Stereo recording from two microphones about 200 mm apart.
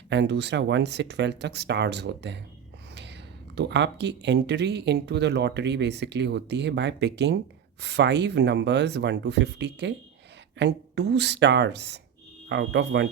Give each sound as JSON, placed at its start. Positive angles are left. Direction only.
{"t": 0.1, "sound": "speech", "side_deg": -60}
{"t": 3.5, "sound": "speech", "side_deg": -60}